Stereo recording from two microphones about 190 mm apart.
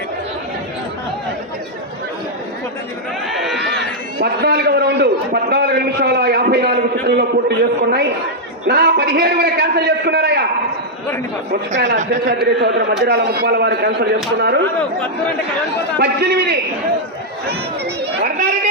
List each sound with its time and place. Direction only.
3.3 s a sound: centre (ahead or behind)
4.2 s a man's voice: 55° right (ahead or behind)
12.5 s a man's voice: 65° right (ahead or behind)
16.0 s a man's voice: 60° right (ahead or behind)
18.0 s chatter: 55° right (ahead or behind)